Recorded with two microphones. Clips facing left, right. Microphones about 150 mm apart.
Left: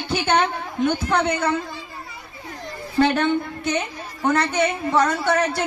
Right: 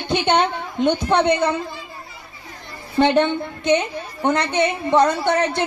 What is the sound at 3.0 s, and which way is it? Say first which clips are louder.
Speech: right 3 dB; 20° right (ahead or behind).